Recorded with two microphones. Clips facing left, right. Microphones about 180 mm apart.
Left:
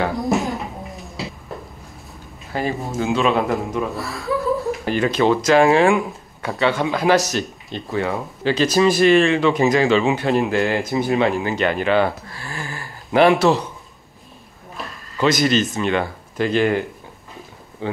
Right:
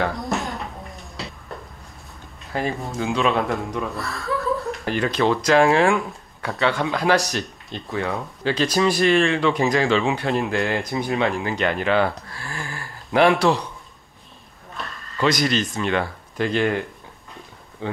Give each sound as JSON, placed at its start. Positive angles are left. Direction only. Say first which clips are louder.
{"t": 0.0, "sound": "a sound", "louder": "left 4 dB", "side_deg": 0}
{"t": 2.5, "sound": "speech", "louder": "left 2 dB", "side_deg": 0}
{"t": 5.8, "sound": "speech", "louder": "left 3 dB", "side_deg": 20}
{"t": 6.4, "sound": "speech", "louder": "left 2 dB", "side_deg": 0}
{"t": 8.7, "sound": "speech", "louder": "left 4 dB", "side_deg": 20}
{"t": 9.3, "sound": "speech", "louder": "left 3 dB", "side_deg": 5}
{"t": 9.6, "sound": "speech", "louder": "left 4 dB", "side_deg": 20}
{"t": 9.8, "sound": "speech", "louder": "left 3 dB", "side_deg": 5}
{"t": 12.5, "sound": "a sound", "louder": "left 2 dB", "side_deg": 5}
{"t": 14.8, "sound": "a sound", "louder": "left 2 dB", "side_deg": 5}
{"t": 15.7, "sound": "speech", "louder": "left 2 dB", "side_deg": 15}